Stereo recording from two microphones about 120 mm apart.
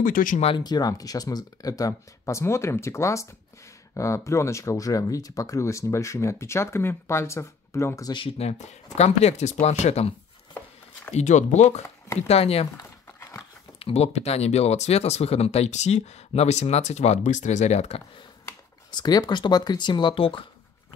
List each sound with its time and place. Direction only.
0.2 s speech: 90° left
0.5 s speech: 35° left (ahead or behind)
8.4 s speech: 65° left (ahead or behind)
11.1 s speech: 80° left
12.3 s speech: 55° left (ahead or behind)
12.7 s crumpling: 25° left (ahead or behind)
13.7 s speech: 55° left (ahead or behind)
18.9 s speech: 35° left (ahead or behind)